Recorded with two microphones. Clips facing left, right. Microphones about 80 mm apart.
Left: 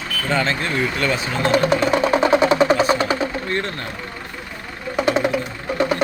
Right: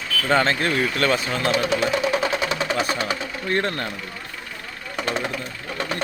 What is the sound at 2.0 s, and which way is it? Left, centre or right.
Music, left.